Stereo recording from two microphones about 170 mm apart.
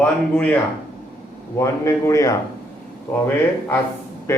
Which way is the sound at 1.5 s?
15° left (ahead or behind).